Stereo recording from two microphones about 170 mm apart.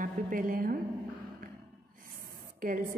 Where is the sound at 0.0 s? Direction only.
55° right (ahead or behind).